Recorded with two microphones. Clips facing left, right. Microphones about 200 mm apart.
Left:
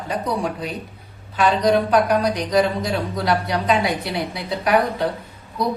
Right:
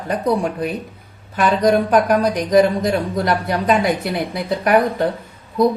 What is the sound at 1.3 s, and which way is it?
Speech, 50° right (ahead or behind).